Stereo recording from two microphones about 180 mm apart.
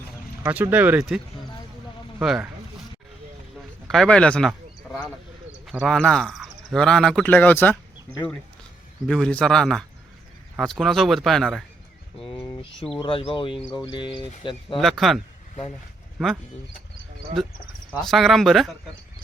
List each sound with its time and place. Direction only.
0.4 s speech: 10° right (ahead or behind)
2.2 s speech: centre (ahead or behind)
3.8 s speech: centre (ahead or behind)
9.0 s speech: 5° left (ahead or behind)
12.8 s speech: 30° left (ahead or behind)
14.8 s speech: centre (ahead or behind)
18.0 s speech: centre (ahead or behind)